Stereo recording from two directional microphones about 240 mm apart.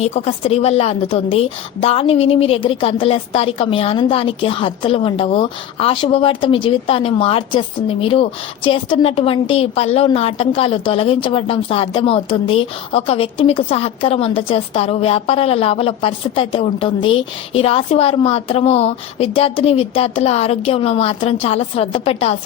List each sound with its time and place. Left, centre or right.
0.0 s a woman's voice: left